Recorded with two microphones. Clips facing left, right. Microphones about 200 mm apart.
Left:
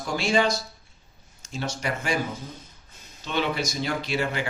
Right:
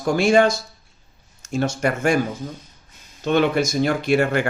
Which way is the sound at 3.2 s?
55° right (ahead or behind).